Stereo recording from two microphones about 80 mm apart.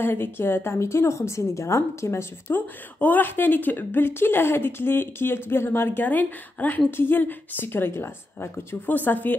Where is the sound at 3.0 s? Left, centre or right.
Left.